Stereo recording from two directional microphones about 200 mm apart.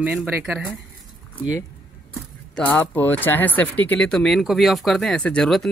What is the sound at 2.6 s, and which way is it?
Speech, 10° left (ahead or behind).